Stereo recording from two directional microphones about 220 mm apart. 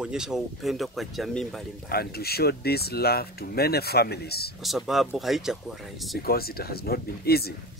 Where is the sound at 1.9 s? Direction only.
45° left (ahead or behind).